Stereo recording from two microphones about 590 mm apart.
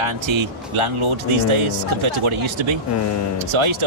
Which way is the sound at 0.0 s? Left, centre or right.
Right.